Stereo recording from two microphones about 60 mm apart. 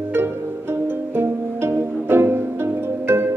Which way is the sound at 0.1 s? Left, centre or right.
Right.